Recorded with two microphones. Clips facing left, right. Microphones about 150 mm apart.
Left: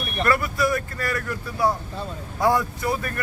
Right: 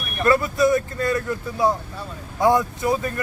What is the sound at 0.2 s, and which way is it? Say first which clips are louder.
A man's voice: right 4 dB; 20° right (ahead or behind).